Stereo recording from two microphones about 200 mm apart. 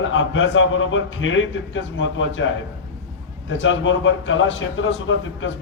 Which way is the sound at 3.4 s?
70° left (ahead or behind).